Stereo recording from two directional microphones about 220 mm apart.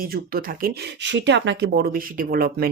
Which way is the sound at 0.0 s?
40° right (ahead or behind).